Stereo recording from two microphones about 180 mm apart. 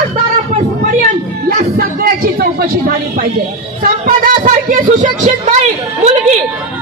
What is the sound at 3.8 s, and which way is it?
A woman's voice, 50° right (ahead or behind).